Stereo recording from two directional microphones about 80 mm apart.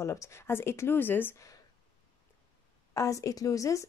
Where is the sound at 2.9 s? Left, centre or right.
Left.